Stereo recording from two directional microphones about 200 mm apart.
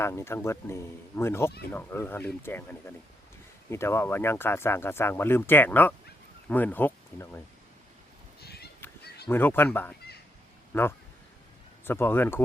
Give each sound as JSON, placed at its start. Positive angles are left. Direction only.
{"t": 0.0, "sound": "speech", "side_deg": 15}
{"t": 3.7, "sound": "speech", "side_deg": 10}
{"t": 8.4, "sound": "a sound", "side_deg": 55}
{"t": 9.3, "sound": "speech", "side_deg": 10}